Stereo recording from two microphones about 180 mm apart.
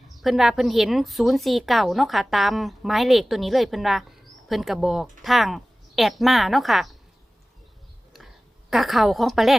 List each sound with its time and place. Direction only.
0.2 s a woman's voice: centre (ahead or behind)
8.7 s a woman's voice: centre (ahead or behind)